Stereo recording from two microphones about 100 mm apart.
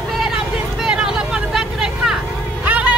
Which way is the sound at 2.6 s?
15° right (ahead or behind).